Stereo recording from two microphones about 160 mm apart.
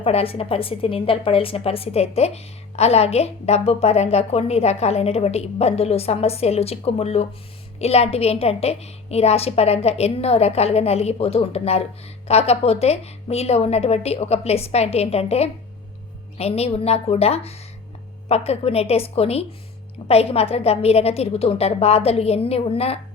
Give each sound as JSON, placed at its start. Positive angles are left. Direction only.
{"t": 0.0, "sound": "a woman's voice", "side_deg": 40}